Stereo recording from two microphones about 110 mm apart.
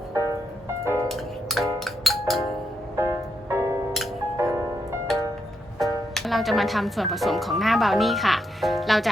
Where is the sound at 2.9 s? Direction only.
25° right (ahead or behind).